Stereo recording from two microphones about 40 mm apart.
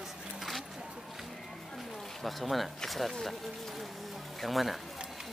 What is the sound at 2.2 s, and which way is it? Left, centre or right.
Speech, centre.